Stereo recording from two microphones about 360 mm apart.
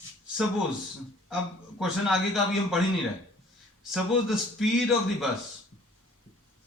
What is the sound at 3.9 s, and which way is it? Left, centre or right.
A man's voice, centre.